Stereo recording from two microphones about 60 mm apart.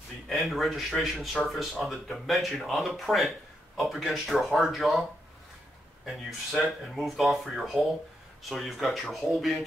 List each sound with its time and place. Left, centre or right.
0.3 s speech: centre
6.0 s speech: centre